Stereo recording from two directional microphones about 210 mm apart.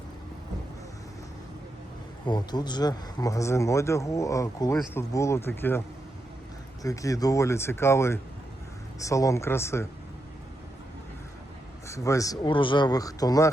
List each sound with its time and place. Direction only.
2.2 s speech: 20° left (ahead or behind)
6.8 s speech: 15° left (ahead or behind)
11.9 s speech: 15° left (ahead or behind)